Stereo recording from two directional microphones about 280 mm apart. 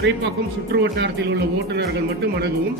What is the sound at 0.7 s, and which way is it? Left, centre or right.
Speech, right.